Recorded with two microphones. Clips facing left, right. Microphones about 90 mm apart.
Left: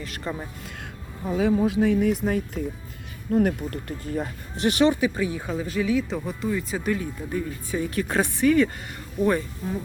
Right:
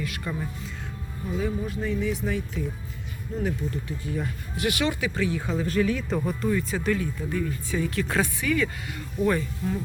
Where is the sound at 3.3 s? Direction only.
60° left (ahead or behind).